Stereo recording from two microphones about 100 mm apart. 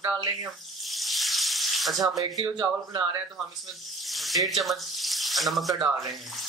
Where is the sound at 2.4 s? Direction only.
45° right (ahead or behind).